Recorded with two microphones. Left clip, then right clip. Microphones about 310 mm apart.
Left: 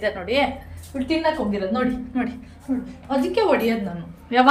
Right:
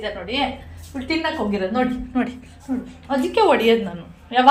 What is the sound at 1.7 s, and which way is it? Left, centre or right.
Speech, centre.